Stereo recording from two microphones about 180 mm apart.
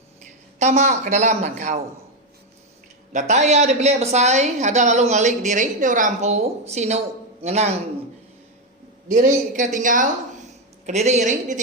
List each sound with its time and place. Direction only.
0.6 s a woman's voice: 40° right (ahead or behind)
3.1 s a woman's voice: 40° right (ahead or behind)
9.0 s a man's voice: 50° right (ahead or behind)